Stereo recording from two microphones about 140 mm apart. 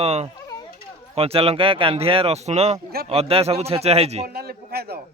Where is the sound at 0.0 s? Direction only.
45° right (ahead or behind).